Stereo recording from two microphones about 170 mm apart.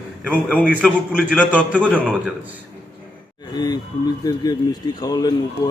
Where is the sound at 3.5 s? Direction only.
25° left (ahead or behind).